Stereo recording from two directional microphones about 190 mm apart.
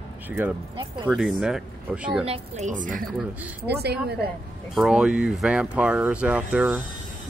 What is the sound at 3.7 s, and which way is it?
Speech, 60° right (ahead or behind).